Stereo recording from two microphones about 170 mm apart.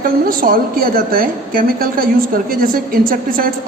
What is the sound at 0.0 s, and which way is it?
A woman's voice, 55° right (ahead or behind).